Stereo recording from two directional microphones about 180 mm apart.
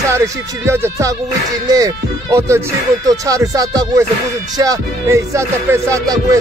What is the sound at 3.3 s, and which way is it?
Speech, 20° right (ahead or behind).